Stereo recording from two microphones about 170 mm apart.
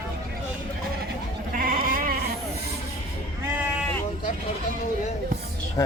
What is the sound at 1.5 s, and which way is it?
Goat, 55° right (ahead or behind).